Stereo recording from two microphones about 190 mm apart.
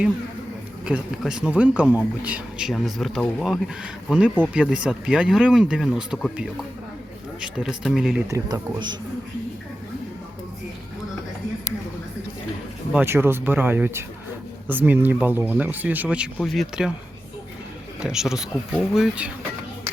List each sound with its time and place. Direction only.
0.9 s speech: 5° right (ahead or behind)
8.3 s speech: 20° right (ahead or behind)
12.9 s speech: 10° right (ahead or behind)
18.0 s speech: 5° right (ahead or behind)